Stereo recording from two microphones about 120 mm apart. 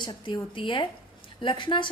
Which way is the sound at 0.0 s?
40° left (ahead or behind).